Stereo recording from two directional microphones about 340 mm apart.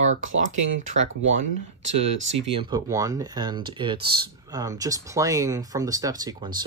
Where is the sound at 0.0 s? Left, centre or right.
Right.